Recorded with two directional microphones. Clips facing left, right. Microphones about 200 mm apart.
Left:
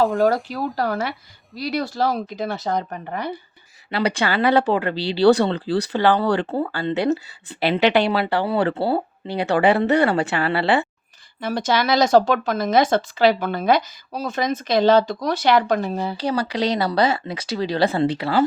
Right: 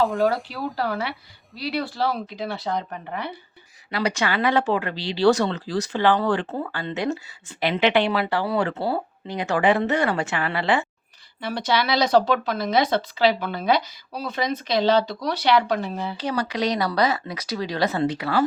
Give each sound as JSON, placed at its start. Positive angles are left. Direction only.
{"t": 0.8, "sound": "speech", "side_deg": 45}
{"t": 3.9, "sound": "speech", "side_deg": 30}
{"t": 11.3, "sound": "speech", "side_deg": 45}